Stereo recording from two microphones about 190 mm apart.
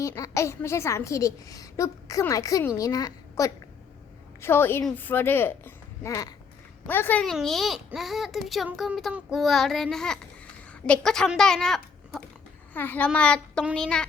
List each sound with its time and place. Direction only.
0.0 s a child's voice: 15° left (ahead or behind)
6.8 s child singing: 10° left (ahead or behind)
12.7 s a child's voice: 10° left (ahead or behind)
13.1 s child singing: 5° left (ahead or behind)